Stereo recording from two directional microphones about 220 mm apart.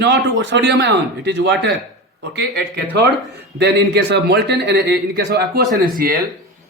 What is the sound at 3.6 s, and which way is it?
Speech, 50° right (ahead or behind).